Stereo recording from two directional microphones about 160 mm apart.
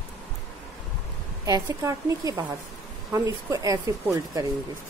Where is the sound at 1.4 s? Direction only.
20° right (ahead or behind).